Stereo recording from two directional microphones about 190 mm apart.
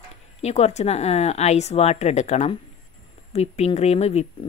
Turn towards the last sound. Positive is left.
turn(degrees=35)  # may be behind; listen again after turning